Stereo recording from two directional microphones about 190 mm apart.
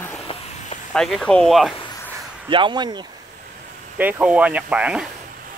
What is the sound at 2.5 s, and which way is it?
Speech, 25° right (ahead or behind).